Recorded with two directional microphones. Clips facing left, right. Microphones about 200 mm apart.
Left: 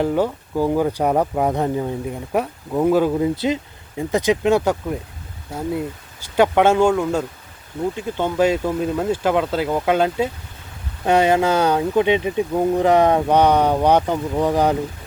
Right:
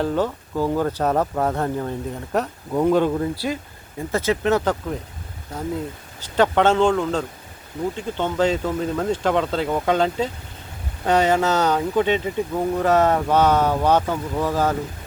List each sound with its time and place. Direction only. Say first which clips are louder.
0.0 s speech: left 3 dB; 15° left (ahead or behind)
3.3 s speech: left 5 dB; 20° left (ahead or behind)